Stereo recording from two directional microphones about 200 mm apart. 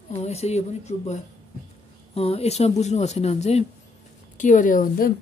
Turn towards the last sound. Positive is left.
turn(degrees=45)  # may be behind; listen again after turning